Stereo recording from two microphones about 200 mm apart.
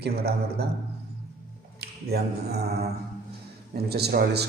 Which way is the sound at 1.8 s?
55° right (ahead or behind).